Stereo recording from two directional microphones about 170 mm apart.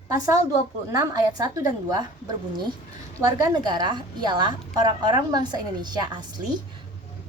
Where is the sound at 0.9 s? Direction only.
20° right (ahead or behind).